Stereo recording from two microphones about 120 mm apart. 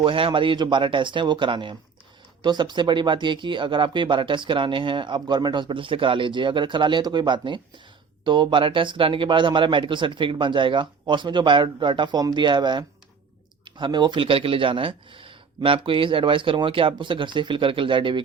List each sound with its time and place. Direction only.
0.0 s speech: 45° right (ahead or behind)